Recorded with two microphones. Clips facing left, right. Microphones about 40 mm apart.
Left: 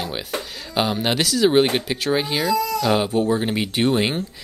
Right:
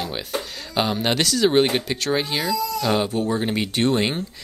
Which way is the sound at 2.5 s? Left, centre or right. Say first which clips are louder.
Left 3 dB; left.